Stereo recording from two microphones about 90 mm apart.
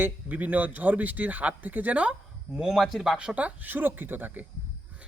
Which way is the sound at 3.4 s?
20° right (ahead or behind).